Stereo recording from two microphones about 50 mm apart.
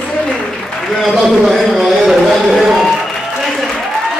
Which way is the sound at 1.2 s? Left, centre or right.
Centre.